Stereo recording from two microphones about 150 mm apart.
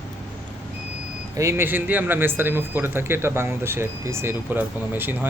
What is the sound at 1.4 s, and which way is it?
Speech, 15° right (ahead or behind).